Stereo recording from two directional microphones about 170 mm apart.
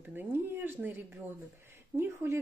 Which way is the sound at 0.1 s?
10° right (ahead or behind).